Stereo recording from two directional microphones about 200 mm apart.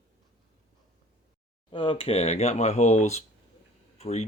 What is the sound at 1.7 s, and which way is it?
Speech, 25° left (ahead or behind).